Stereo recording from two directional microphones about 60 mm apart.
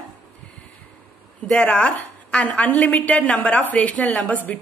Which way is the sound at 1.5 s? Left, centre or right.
Left.